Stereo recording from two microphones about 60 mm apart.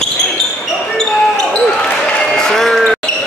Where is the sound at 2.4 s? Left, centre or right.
Centre.